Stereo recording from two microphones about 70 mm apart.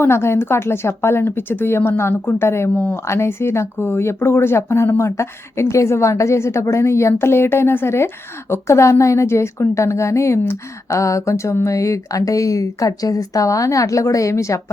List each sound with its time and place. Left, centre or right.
0.0 s a woman's voice: left